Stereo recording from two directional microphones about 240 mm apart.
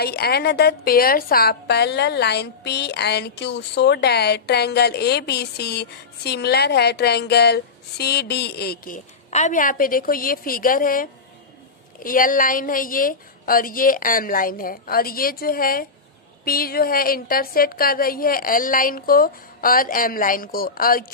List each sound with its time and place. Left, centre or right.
0.0 s a woman's voice: left